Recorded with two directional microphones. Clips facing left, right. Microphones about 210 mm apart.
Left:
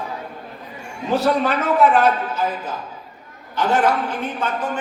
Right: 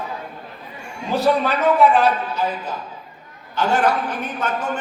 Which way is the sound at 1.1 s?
Centre (ahead or behind).